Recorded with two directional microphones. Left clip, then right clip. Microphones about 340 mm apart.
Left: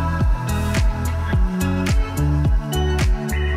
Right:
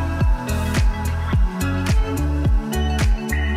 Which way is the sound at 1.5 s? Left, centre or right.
Centre.